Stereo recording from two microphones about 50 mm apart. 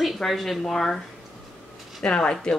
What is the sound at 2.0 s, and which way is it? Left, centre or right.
Speech, left.